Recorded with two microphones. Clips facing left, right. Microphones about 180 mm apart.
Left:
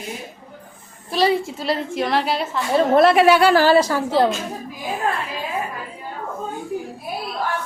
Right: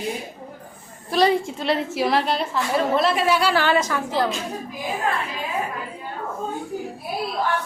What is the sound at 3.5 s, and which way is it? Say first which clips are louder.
Speech: left 6 dB; 35° left (ahead or behind).